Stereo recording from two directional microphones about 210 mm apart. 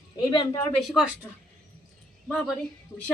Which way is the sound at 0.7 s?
Centre (ahead or behind).